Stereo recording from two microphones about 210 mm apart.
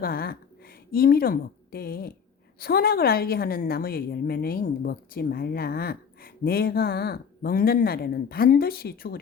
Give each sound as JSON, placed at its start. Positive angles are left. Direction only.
{"t": 0.0, "sound": "a woman's voice", "side_deg": 45}